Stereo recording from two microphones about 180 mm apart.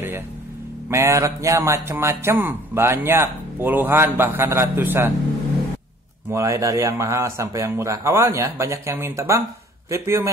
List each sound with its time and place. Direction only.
0.8 s a man's voice: 15° right (ahead or behind)
6.3 s a man's voice: 15° right (ahead or behind)